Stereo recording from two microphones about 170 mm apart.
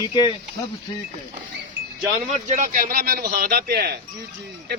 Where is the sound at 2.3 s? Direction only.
45° right (ahead or behind).